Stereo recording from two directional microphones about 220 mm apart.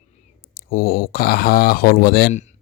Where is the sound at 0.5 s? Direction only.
40° left (ahead or behind).